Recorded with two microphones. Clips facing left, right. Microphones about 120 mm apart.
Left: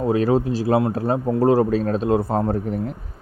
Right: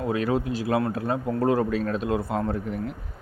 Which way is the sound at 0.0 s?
35° left (ahead or behind).